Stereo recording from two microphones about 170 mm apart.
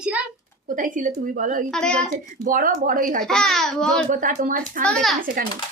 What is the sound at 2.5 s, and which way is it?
Speech, 55° right (ahead or behind).